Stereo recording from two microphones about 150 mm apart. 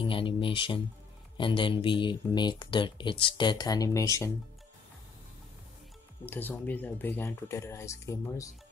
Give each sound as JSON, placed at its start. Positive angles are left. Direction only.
{"t": 0.0, "sound": "a sound", "side_deg": 35}
{"t": 1.3, "sound": "speech", "side_deg": 35}
{"t": 6.2, "sound": "speech", "side_deg": 10}